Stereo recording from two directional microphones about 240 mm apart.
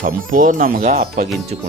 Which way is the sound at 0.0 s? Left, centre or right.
Right.